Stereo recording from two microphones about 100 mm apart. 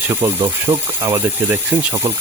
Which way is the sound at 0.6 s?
25° right (ahead or behind).